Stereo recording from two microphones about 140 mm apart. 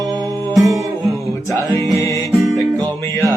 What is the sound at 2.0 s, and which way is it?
Music, 20° left (ahead or behind).